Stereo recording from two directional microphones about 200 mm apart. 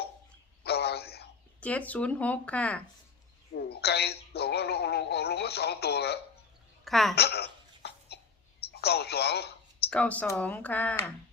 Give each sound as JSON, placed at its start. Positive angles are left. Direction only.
{"t": 0.6, "sound": "a sound", "side_deg": 55}
{"t": 1.6, "sound": "speech", "side_deg": 5}
{"t": 3.5, "sound": "a woman's voice", "side_deg": 55}
{"t": 6.8, "sound": "a woman's voice", "side_deg": 0}
{"t": 7.2, "sound": "cough", "side_deg": 55}
{"t": 8.7, "sound": "speech", "side_deg": 55}
{"t": 9.9, "sound": "speech", "side_deg": 5}